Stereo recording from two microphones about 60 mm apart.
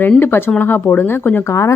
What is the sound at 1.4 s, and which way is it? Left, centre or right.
Speech, left.